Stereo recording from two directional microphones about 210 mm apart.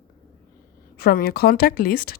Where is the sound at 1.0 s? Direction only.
45° left (ahead or behind).